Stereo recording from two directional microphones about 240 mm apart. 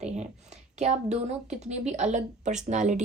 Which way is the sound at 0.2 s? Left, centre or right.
Right.